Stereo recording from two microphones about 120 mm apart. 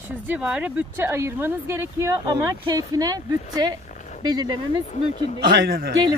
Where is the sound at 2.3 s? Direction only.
35° right (ahead or behind).